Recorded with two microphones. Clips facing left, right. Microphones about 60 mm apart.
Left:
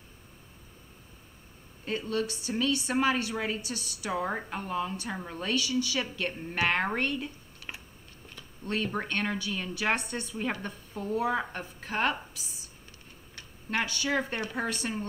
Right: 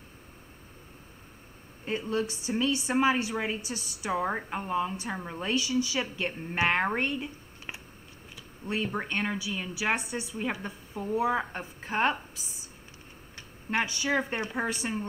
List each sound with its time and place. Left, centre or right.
1.9 s speech: right